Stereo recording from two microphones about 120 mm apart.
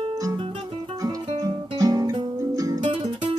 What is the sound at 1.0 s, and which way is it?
Guitar, 30° right (ahead or behind).